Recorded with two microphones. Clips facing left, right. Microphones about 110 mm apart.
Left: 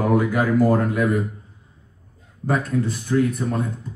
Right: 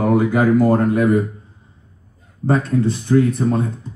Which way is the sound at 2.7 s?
30° right (ahead or behind).